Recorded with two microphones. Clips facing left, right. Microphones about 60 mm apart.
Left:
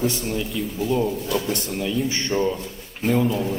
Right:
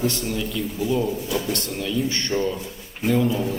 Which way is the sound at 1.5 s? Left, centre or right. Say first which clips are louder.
Left 1 dB; centre.